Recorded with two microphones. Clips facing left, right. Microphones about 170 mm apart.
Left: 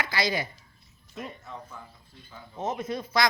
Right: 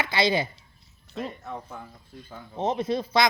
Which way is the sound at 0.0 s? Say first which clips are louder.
Right 5 dB; 25° right (ahead or behind).